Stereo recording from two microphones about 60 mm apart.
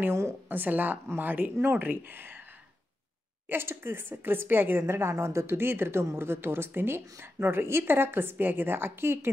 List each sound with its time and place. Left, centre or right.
0.5 s a woman's voice: right
3.4 s a woman's voice: right